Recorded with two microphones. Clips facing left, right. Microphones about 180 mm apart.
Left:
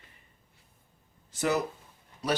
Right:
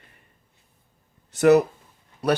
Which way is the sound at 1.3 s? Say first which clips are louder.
Right 12 dB; 65° right (ahead or behind).